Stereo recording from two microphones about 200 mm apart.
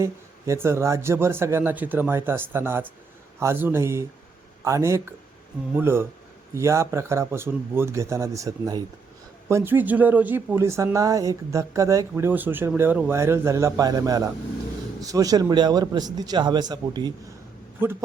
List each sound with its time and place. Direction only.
0.0 s a man's voice: 15° right (ahead or behind)